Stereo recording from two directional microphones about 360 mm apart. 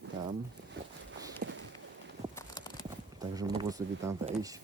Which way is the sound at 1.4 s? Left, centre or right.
Right.